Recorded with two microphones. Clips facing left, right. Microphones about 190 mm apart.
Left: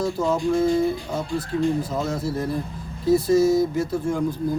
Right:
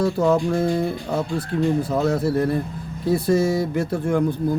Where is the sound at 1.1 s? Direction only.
65° right (ahead or behind).